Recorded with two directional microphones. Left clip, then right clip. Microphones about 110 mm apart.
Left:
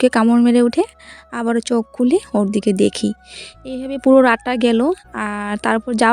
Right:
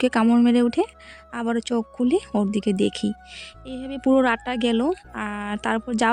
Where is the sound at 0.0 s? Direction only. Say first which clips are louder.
Left 5 dB; 40° left (ahead or behind).